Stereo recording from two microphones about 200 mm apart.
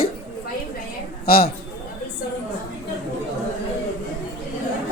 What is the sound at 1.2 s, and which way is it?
Speech, 50° left (ahead or behind).